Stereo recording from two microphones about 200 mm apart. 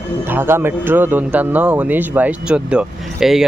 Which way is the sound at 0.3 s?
10° right (ahead or behind).